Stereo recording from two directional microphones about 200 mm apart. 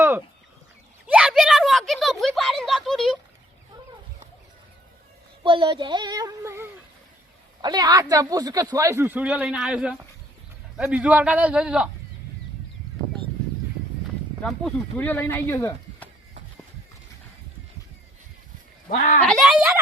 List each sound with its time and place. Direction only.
1.0 s a sound: 5° right (ahead or behind)
2.2 s a man's voice: centre (ahead or behind)
5.4 s a man's voice: 25° right (ahead or behind); by 11.9 s 5° right (ahead or behind)
14.4 s speech: 5° left (ahead or behind)
18.9 s speech: 45° left (ahead or behind)
19.3 s a man's voice: centre (ahead or behind)